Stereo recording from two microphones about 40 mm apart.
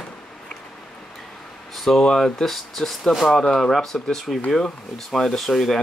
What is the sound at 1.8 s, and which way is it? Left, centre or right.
Speech, centre.